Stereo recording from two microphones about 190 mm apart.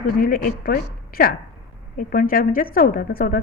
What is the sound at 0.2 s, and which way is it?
A woman's voice, 50° left (ahead or behind).